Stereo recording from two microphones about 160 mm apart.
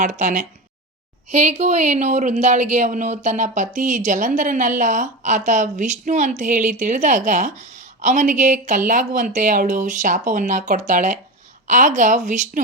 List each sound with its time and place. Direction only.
0.0 s a woman's voice: 45° right (ahead or behind)
1.3 s a woman's voice: 45° right (ahead or behind)